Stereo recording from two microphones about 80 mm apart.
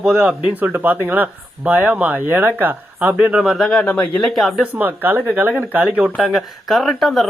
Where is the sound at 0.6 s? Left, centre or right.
Right.